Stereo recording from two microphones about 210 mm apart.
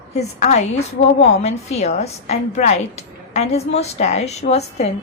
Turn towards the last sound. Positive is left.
turn(degrees=30)  # may be behind; listen again after turning